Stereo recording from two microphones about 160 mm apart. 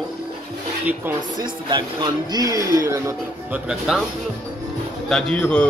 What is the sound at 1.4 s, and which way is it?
Speech, 25° right (ahead or behind).